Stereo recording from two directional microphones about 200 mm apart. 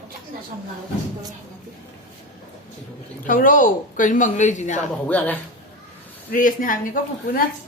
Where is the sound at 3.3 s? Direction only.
45° left (ahead or behind).